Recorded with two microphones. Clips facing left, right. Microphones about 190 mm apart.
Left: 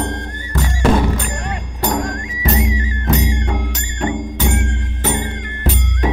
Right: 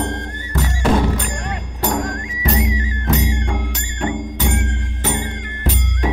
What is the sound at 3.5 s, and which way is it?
Music, 40° left (ahead or behind).